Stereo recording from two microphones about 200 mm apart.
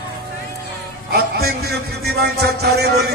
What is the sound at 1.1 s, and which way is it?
A man's voice, 50° right (ahead or behind).